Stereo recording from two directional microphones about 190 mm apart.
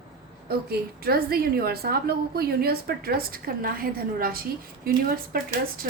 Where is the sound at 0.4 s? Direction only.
55° right (ahead or behind).